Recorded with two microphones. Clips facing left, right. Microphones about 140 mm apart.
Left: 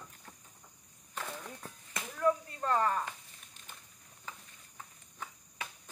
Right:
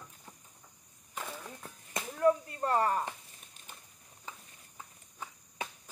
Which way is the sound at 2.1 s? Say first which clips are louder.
Right 3 dB; 35° right (ahead or behind).